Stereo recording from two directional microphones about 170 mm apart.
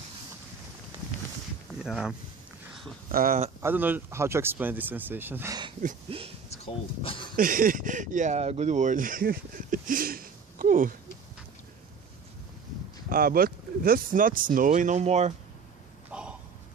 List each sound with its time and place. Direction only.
1.8 s speech: 5° right (ahead or behind)
3.1 s speech: 55° right (ahead or behind)
3.6 s speech: 10° right (ahead or behind)
6.0 s speech: 35° right (ahead or behind)
6.5 s speech: 35° left (ahead or behind)
7.3 s speech: 55° right (ahead or behind)
13.1 s speech: 60° right (ahead or behind); by 15.3 s 40° right (ahead or behind)
16.1 s a sound: 5° right (ahead or behind)